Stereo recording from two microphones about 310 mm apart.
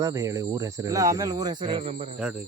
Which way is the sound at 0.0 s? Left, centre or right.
Centre.